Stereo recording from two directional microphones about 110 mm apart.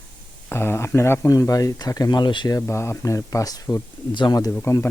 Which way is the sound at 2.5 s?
25° left (ahead or behind).